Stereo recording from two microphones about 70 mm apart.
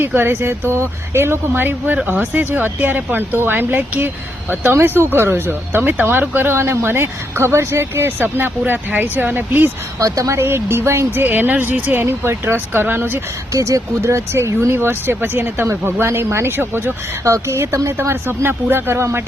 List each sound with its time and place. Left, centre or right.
0.0 s speech: right
10.0 s a woman's voice: right
10.4 s speech: right
12.0 s speech: right
13.5 s speech: right